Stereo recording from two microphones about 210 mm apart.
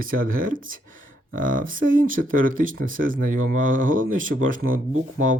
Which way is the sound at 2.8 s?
40° right (ahead or behind).